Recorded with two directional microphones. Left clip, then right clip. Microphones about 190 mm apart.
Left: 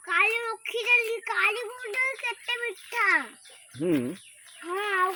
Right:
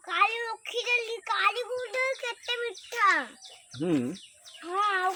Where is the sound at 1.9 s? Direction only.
10° right (ahead or behind).